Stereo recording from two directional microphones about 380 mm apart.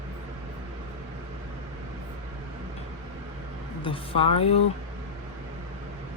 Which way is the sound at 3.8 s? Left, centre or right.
Centre.